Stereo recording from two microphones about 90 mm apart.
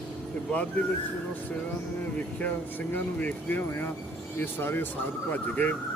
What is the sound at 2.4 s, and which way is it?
Speech, 20° left (ahead or behind).